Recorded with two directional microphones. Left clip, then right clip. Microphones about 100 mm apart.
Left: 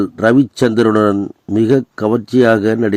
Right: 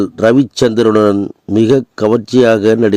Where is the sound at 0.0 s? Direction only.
30° right (ahead or behind).